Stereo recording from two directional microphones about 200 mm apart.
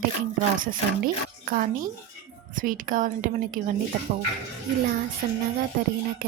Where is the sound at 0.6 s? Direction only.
45° right (ahead or behind).